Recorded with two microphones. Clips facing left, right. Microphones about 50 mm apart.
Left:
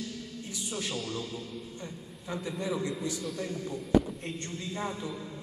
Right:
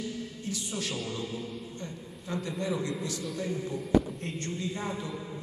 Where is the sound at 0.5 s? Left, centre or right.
Centre.